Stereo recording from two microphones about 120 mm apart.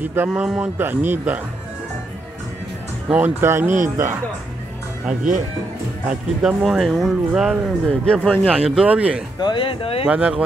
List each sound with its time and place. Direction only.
0.0 s speech: 20° right (ahead or behind)
0.3 s speech: 10° right (ahead or behind)
3.1 s speech: 15° right (ahead or behind)
6.0 s speech: 5° right (ahead or behind)
8.0 s speech: 5° left (ahead or behind)
8.5 s speech: 10° right (ahead or behind)
9.4 s speech: 40° left (ahead or behind)
10.0 s speech: 10° right (ahead or behind)